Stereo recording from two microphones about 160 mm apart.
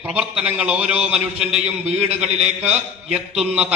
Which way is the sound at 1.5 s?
45° right (ahead or behind).